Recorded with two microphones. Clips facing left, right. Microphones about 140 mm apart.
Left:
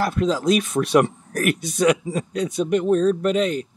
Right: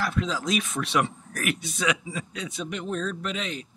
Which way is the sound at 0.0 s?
40° left (ahead or behind).